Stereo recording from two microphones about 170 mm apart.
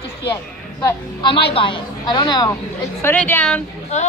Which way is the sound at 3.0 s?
10° left (ahead or behind).